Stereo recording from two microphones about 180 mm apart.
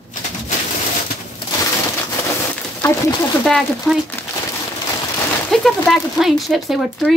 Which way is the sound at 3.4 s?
Centre (ahead or behind).